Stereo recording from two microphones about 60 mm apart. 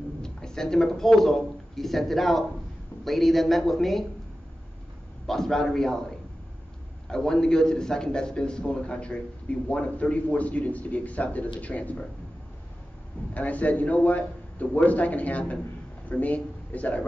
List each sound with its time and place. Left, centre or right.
0.2 s a man's voice: centre
5.2 s a man's voice: centre; by 12.0 s left
13.3 s a man's voice: left